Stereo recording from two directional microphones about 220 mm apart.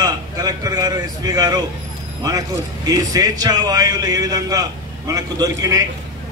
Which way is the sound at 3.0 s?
15° right (ahead or behind).